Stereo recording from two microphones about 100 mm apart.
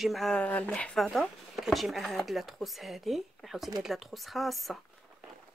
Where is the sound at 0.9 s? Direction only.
Centre (ahead or behind).